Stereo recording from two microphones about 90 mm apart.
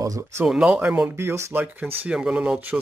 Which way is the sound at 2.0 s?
10° right (ahead or behind).